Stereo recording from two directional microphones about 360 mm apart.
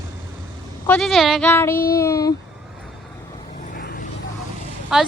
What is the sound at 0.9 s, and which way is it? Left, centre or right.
Speech, centre.